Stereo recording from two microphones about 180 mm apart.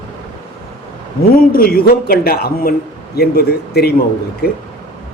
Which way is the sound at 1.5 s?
55° left (ahead or behind).